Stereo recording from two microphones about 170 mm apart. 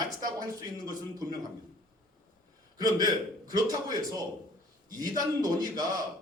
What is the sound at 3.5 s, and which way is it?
A man's voice, 20° right (ahead or behind).